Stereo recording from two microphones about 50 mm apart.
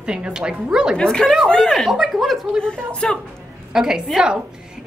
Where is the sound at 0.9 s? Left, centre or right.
Centre.